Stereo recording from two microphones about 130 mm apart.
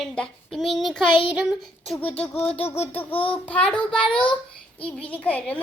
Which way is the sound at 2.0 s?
10° left (ahead or behind).